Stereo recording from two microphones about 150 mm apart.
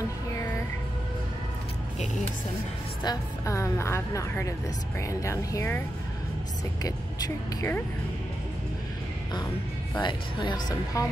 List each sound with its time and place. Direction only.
3.0 s a woman's voice: 25° left (ahead or behind)
9.9 s a woman's voice: 30° left (ahead or behind)